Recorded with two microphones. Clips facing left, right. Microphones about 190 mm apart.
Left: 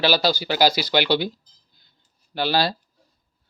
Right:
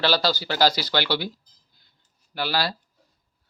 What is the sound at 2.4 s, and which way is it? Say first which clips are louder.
Speech: left 4 dB; 25° left (ahead or behind).